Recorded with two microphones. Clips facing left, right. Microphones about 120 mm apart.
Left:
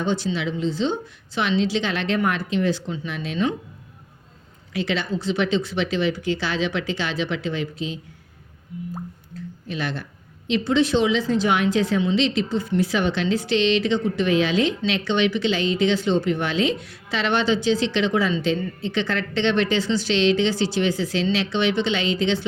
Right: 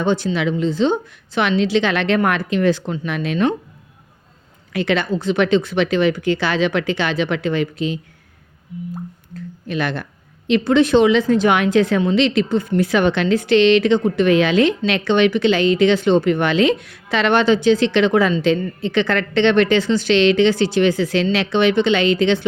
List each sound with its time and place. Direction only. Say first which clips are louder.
0.0 s a woman's voice: right 5 dB; 60° right (ahead or behind)
4.7 s a woman's voice: right 6 dB; 60° right (ahead or behind)
9.6 s a woman's voice: right 6 dB; 60° right (ahead or behind)